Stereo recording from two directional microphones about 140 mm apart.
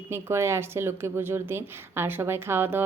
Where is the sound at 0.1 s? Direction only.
20° right (ahead or behind).